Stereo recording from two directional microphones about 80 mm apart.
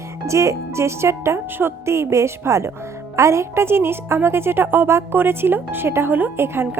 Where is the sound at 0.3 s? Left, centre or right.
Right.